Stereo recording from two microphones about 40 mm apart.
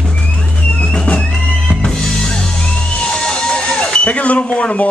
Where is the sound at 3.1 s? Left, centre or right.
Centre.